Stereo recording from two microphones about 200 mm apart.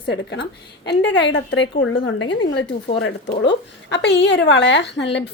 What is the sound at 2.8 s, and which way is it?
A woman's voice, 60° left (ahead or behind).